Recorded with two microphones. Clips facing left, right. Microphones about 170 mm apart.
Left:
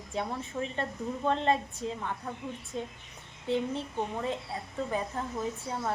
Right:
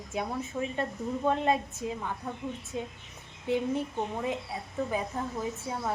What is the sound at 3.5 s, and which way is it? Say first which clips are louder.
A woman's voice: right 2 dB; 10° right (ahead or behind).